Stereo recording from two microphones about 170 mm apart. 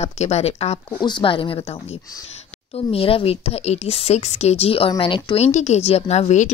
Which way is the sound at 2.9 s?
35° left (ahead or behind).